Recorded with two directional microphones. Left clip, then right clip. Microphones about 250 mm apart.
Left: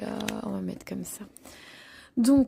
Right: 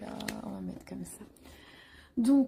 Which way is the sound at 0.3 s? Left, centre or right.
Left.